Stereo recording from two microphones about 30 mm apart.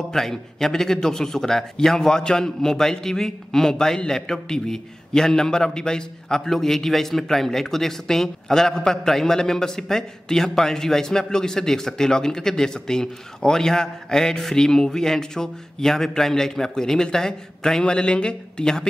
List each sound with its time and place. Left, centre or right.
0.1 s a man's voice: centre; by 18.8 s left